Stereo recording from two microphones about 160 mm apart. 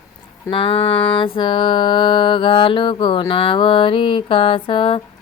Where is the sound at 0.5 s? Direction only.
35° left (ahead or behind).